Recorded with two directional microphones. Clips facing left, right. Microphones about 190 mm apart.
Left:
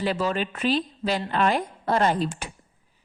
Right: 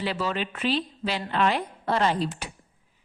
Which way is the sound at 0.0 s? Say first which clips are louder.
Left 3 dB; 45° left (ahead or behind).